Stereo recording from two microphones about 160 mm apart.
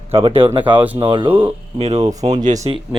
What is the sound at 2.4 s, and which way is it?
Speech, 50° right (ahead or behind).